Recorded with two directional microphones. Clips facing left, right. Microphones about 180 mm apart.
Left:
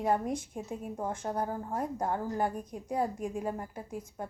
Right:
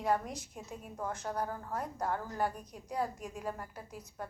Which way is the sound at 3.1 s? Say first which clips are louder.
Left 8 dB; 50° left (ahead or behind).